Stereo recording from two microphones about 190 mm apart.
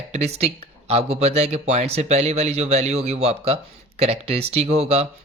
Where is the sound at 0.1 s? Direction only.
35° right (ahead or behind).